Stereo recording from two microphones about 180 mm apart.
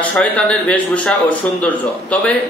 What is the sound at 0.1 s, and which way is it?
A man's voice, 10° left (ahead or behind).